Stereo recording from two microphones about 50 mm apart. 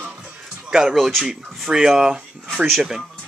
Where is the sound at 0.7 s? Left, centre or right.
Centre.